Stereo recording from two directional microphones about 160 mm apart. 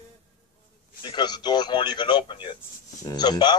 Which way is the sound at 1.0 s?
25° left (ahead or behind).